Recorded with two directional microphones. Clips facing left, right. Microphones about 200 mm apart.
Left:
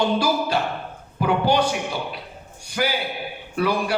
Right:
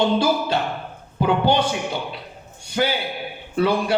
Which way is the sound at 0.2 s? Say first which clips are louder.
Right 1 dB; 25° right (ahead or behind).